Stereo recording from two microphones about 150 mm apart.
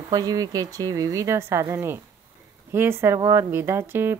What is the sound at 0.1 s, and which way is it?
Speech, 25° right (ahead or behind).